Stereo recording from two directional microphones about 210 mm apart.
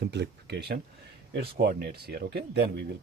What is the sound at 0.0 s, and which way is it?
Speech, 55° right (ahead or behind).